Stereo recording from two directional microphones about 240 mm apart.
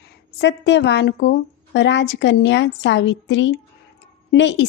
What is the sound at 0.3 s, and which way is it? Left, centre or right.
A woman's voice, left.